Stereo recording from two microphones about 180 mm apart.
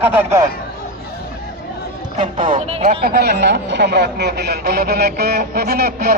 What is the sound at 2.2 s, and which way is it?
Speech, 30° right (ahead or behind).